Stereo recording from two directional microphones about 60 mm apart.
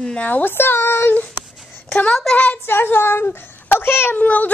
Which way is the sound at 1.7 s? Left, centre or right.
Left.